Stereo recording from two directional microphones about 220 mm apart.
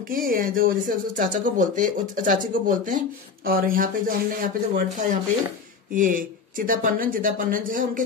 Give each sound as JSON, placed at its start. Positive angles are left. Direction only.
{"t": 0.1, "sound": "speech", "side_deg": -40}